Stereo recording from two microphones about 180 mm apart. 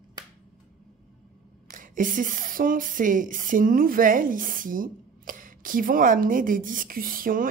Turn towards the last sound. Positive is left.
turn(degrees=-50)  # may be behind; listen again after turning